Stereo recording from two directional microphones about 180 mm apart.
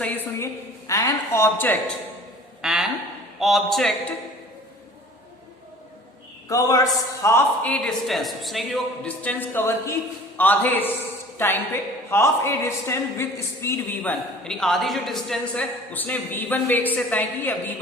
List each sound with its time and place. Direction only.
0.0 s a man's voice: 10° left (ahead or behind)
2.6 s a sound: 5° right (ahead or behind)
3.4 s a man's voice: centre (ahead or behind)
6.5 s a man's voice: 20° left (ahead or behind)